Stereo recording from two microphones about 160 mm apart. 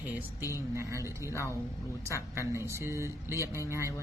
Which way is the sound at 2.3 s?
15° right (ahead or behind).